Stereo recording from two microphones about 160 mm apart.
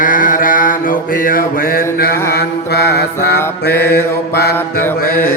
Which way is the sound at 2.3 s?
85° left.